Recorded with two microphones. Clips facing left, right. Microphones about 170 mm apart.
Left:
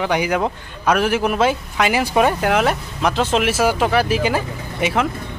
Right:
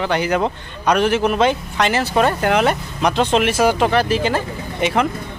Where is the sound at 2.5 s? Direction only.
Centre (ahead or behind).